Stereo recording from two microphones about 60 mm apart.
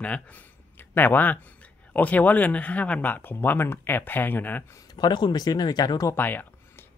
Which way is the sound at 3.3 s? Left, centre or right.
Left.